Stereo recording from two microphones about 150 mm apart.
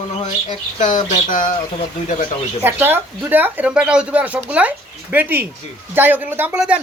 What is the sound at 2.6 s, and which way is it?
Speech, 15° right (ahead or behind).